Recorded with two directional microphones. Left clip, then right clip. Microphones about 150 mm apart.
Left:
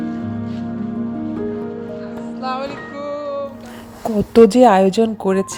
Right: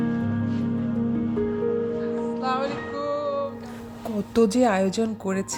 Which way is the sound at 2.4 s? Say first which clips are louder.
Left 5 dB; 10° left (ahead or behind).